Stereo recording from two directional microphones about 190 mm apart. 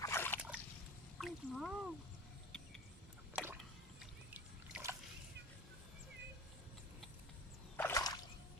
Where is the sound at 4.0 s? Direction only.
5° right (ahead or behind).